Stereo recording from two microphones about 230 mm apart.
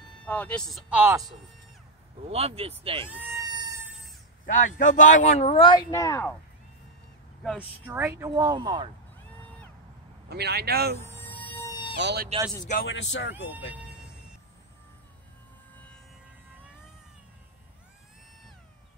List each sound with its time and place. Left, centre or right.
0.2 s speech: centre
2.2 s speech: right
3.1 s cat: centre
4.5 s a man's voice: left; by 6.3 s centre
7.4 s speech: centre
10.3 s speech: right
11.0 s music: centre
12.0 s speech: right
12.6 s speech: left